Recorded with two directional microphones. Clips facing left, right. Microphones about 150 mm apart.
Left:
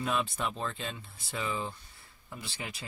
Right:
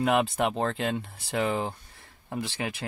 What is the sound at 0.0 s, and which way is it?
Speech, 80° right.